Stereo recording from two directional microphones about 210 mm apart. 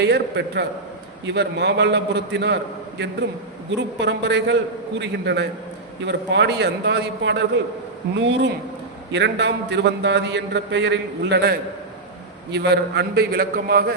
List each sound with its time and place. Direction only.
0.0 s a man's voice: 55° right (ahead or behind)
3.7 s a man's voice: 55° right (ahead or behind)